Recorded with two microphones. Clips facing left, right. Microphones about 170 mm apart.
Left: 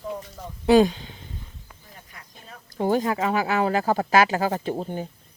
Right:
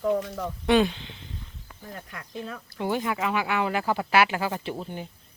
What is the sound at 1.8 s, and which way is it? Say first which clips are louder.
Speech: right 11 dB; 65° right (ahead or behind).